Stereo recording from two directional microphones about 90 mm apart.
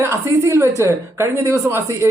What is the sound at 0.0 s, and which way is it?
Speech, 30° right (ahead or behind).